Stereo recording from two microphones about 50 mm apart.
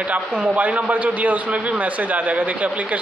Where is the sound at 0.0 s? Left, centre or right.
Right.